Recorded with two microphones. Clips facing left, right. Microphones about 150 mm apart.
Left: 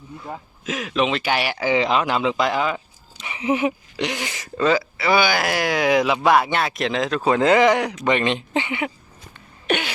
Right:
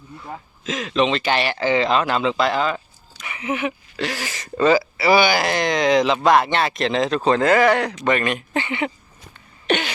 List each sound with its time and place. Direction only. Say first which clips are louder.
0.3 s speech: even; 10° left (ahead or behind)
3.2 s speech: left 4 dB; 30° left (ahead or behind)
4.5 s speech: right 3 dB; 5° right (ahead or behind); by 8.9 s 10° left (ahead or behind)
9.6 s cough: right 2 dB; 5° left (ahead or behind)